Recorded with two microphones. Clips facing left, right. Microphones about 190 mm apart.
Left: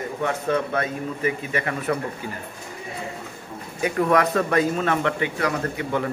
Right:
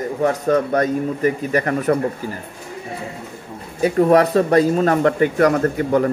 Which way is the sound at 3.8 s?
35° right (ahead or behind).